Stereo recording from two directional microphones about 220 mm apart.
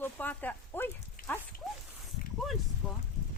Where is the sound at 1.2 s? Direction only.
40° left (ahead or behind).